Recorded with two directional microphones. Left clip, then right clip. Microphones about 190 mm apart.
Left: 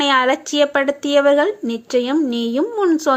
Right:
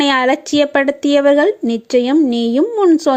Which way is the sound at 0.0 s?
45° right (ahead or behind).